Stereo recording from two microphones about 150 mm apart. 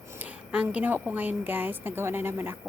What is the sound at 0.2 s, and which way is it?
Speech, 10° right (ahead or behind).